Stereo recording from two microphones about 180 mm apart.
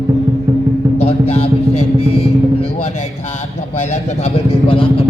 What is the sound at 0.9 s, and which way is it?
Music, 35° left (ahead or behind).